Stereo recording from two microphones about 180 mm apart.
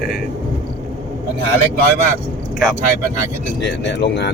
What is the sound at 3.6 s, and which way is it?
Speech, 70° left (ahead or behind).